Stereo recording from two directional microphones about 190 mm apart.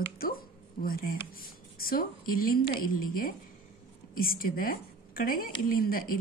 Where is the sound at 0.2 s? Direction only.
50° left (ahead or behind).